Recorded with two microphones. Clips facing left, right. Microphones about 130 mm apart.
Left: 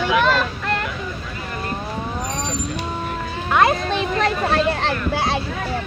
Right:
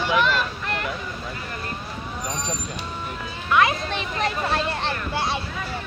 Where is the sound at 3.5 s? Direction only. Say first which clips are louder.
Left 3 dB; 50° left (ahead or behind).